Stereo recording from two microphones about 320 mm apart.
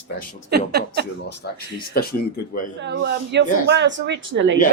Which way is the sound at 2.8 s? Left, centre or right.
Right.